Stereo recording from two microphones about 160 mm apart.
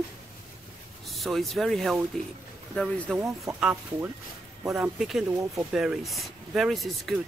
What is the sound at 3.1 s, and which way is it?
Speech, 15° right (ahead or behind).